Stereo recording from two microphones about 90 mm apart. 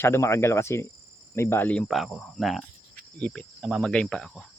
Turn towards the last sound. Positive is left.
turn(degrees=10)  # may be behind; listen again after turning